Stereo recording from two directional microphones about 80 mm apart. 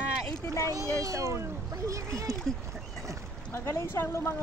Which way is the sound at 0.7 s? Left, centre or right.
Right.